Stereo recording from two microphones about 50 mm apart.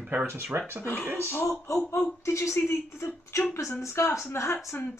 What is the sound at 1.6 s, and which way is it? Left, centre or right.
Speech, left.